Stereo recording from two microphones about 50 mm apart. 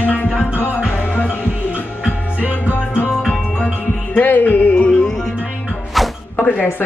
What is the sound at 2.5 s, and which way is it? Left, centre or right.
Music, left.